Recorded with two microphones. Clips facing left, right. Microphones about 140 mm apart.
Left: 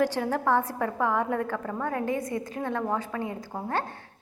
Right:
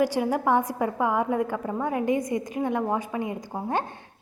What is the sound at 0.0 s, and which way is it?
A woman's voice, 10° right (ahead or behind).